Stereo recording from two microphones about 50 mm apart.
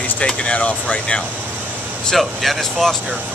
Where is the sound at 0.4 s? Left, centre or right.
Left.